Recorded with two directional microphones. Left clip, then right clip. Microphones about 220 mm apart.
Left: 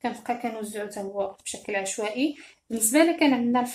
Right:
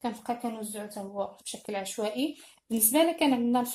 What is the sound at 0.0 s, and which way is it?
Speech, 20° right (ahead or behind).